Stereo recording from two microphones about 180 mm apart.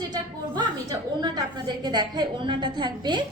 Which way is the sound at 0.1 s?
25° right (ahead or behind).